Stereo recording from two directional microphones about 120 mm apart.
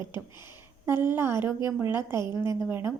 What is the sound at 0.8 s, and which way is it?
A woman's voice, 20° right (ahead or behind).